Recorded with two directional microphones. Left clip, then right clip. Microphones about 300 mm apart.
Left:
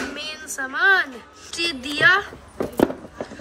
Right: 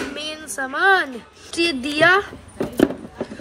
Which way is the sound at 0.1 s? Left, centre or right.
Centre.